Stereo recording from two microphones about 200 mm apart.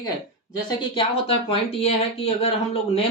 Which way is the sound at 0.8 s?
25° left (ahead or behind).